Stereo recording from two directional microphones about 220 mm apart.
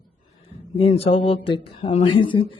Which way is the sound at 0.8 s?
25° left (ahead or behind).